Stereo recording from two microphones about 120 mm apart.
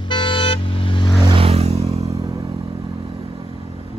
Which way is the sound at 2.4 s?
50° right (ahead or behind).